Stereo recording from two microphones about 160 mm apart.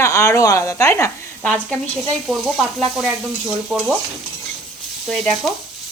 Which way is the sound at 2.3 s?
Centre (ahead or behind).